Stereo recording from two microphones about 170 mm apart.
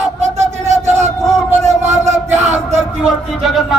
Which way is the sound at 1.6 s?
40° right (ahead or behind).